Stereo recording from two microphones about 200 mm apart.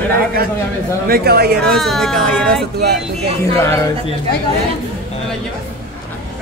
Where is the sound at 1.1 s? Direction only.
50° right (ahead or behind).